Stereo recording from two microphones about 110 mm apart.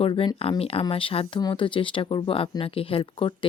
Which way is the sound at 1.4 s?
45° left (ahead or behind).